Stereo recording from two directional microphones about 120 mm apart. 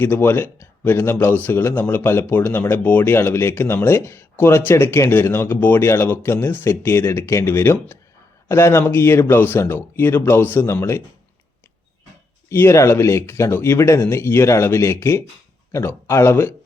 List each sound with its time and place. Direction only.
0.0 s a man's voice: 15° left (ahead or behind)
12.5 s a man's voice: 20° left (ahead or behind)